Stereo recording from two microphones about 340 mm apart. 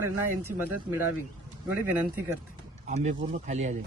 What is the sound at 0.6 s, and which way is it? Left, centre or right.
Speech, centre.